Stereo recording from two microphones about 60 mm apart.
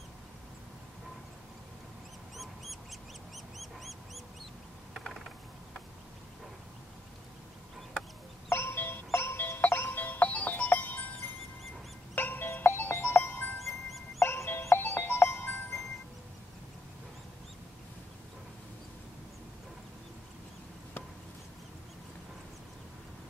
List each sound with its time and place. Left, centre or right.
2.3 s duck: centre
8.5 s music: left
12.2 s music: left
13.6 s music: centre
14.2 s music: left